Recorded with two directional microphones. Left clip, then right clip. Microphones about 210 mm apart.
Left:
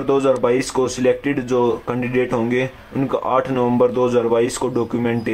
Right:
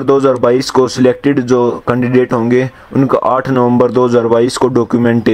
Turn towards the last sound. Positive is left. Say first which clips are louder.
# right 9 dB
turn(degrees=-40)  # may be behind; listen again after turning